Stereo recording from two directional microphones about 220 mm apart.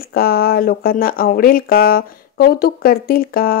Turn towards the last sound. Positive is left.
turn(degrees=40)  # may be behind; listen again after turning